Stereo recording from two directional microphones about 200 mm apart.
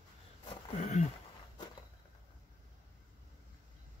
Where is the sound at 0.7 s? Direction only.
35° left (ahead or behind).